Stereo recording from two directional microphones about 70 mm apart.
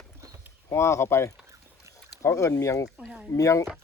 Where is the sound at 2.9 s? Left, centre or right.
Right.